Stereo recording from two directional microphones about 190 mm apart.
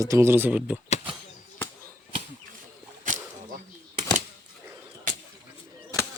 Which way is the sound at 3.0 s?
45° right (ahead or behind).